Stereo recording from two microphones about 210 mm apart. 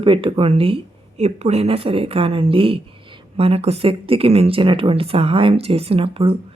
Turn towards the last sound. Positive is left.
turn(degrees=-25)  # may be behind; listen again after turning